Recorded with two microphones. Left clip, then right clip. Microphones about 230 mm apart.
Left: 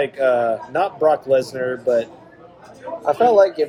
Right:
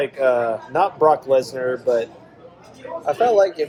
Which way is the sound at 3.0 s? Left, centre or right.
Left.